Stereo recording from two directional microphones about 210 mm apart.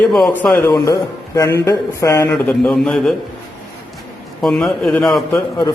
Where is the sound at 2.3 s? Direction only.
5° left (ahead or behind).